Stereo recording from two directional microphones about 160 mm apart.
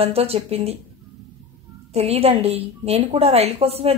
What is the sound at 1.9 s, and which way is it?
Speech, 40° right (ahead or behind).